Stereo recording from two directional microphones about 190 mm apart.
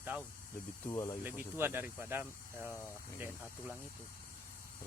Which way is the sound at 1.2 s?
10° right (ahead or behind).